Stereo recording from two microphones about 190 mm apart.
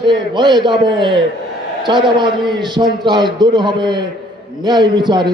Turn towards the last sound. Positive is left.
turn(degrees=-25)  # may be behind; listen again after turning